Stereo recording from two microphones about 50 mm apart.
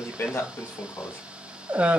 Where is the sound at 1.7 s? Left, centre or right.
Right.